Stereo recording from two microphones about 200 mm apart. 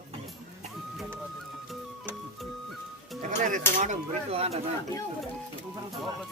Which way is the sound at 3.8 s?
35° right (ahead or behind).